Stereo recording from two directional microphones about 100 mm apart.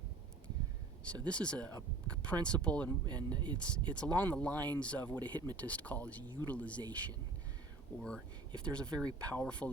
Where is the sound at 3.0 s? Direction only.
45° right (ahead or behind).